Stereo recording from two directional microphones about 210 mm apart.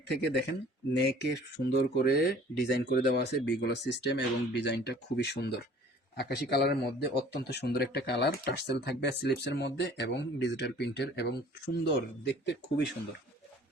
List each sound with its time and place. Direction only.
0.1 s speech: 55° left (ahead or behind)